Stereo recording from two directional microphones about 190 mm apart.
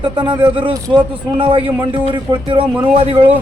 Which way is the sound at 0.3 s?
25° right (ahead or behind).